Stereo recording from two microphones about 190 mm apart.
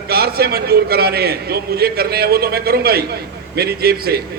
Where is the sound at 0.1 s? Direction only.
55° right (ahead or behind).